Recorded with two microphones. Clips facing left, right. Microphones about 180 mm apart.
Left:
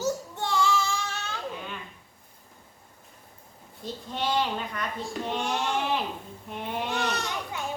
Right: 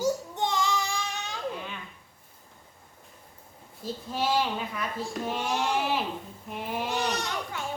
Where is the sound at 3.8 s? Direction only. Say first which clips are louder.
Right 1 dB; 5° right (ahead or behind).